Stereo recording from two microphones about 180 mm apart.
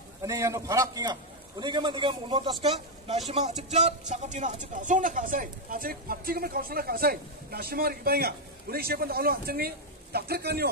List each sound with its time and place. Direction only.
0.2 s a man's voice: 15° right (ahead or behind)
3.3 s speech: 40° right (ahead or behind); by 10.7 s 60° right (ahead or behind)